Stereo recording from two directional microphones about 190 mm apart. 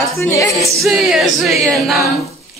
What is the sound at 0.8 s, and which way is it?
Music, centre (ahead or behind).